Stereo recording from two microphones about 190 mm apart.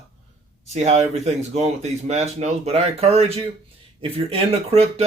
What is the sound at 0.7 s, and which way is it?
Speech, 35° right (ahead or behind).